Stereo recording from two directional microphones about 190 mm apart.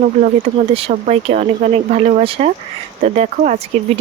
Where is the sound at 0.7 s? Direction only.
30° right (ahead or behind).